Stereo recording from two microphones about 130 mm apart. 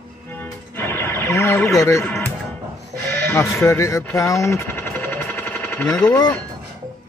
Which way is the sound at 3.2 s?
20° left (ahead or behind).